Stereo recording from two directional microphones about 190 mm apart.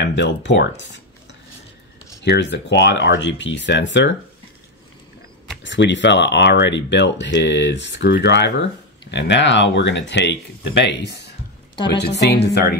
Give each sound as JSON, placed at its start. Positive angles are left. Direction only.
{"t": 0.0, "sound": "speech", "side_deg": 65}
{"t": 2.2, "sound": "speech", "side_deg": 65}
{"t": 5.6, "sound": "speech", "side_deg": 70}